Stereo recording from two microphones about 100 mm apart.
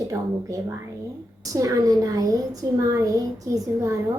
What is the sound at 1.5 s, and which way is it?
A woman's voice, 35° right (ahead or behind).